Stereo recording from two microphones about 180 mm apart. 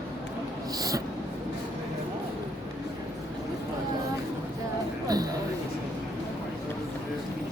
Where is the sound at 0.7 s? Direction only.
20° right (ahead or behind).